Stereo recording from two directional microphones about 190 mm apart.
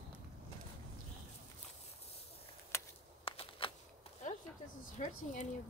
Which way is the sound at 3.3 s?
30° left (ahead or behind).